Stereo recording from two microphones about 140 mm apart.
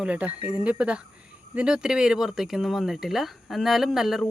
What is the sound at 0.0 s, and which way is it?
Speech, 10° right (ahead or behind).